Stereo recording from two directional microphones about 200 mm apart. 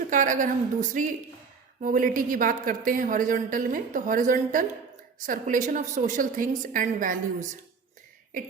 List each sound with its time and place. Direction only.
0.1 s a woman's voice: 40° right (ahead or behind)